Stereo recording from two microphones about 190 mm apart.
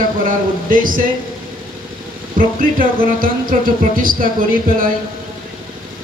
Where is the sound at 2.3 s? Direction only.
50° right (ahead or behind).